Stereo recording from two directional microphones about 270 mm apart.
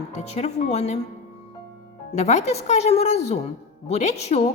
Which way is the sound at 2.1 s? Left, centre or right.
Left.